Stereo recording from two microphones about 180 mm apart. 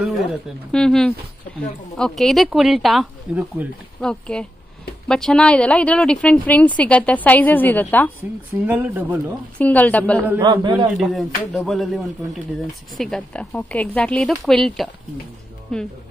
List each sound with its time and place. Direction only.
0.7 s speech: 5° left (ahead or behind)
8.6 s speech: 10° right (ahead or behind)
9.6 s speech: 10° left (ahead or behind)
10.4 s a man's voice: 25° right (ahead or behind)
11.0 s speech: centre (ahead or behind)